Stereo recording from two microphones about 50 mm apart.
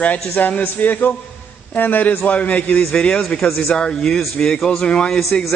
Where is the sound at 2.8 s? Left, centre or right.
Centre.